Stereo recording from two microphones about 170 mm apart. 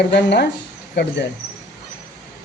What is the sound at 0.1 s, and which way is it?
Speech, 90° left.